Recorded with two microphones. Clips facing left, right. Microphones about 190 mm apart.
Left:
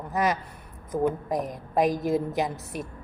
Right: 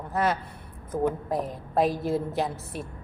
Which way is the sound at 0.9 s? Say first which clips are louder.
Left 1 dB; 5° left (ahead or behind).